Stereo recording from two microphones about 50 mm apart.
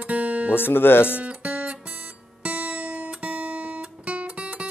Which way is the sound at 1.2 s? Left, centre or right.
Right.